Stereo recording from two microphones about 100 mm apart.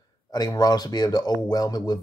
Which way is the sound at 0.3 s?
40° left (ahead or behind).